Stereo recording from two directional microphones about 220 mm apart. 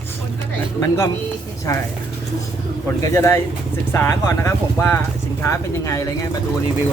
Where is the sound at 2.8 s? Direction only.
10° left (ahead or behind).